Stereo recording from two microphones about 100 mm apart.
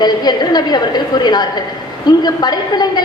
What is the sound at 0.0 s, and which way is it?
A woman's voice, 45° left (ahead or behind).